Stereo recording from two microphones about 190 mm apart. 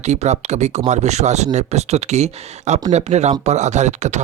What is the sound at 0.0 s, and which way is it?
Speech, 35° right (ahead or behind).